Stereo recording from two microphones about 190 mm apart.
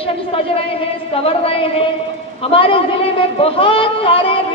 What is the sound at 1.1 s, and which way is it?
A woman's voice, 30° left (ahead or behind).